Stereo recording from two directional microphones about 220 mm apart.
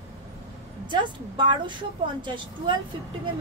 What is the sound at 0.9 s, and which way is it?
A woman's voice, 20° right (ahead or behind).